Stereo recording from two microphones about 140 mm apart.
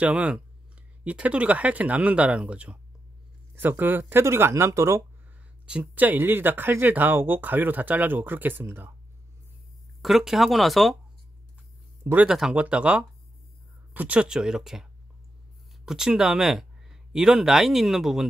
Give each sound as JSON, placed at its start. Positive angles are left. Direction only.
{"t": 0.0, "sound": "speech", "side_deg": -10}
{"t": 5.7, "sound": "speech", "side_deg": -10}
{"t": 10.0, "sound": "speech", "side_deg": 0}
{"t": 12.0, "sound": "speech", "side_deg": -15}
{"t": 12.3, "sound": "speech", "side_deg": -5}